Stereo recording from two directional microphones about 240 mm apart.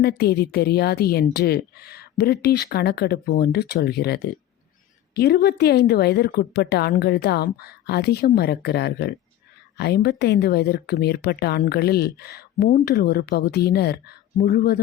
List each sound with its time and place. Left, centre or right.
0.0 s a woman's voice: left